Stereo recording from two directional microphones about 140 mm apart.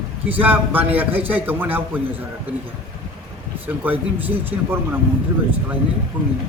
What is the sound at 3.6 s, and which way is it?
A man's voice, 15° right (ahead or behind).